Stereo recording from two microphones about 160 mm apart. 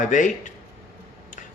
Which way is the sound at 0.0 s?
55° left (ahead or behind).